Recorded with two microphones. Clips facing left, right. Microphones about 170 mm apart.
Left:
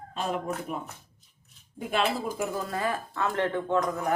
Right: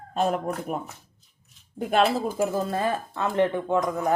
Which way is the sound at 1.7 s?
45° right (ahead or behind).